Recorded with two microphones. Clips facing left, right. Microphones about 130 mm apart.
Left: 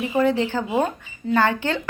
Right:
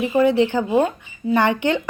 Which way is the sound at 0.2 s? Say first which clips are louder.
Right 4 dB; 15° right (ahead or behind).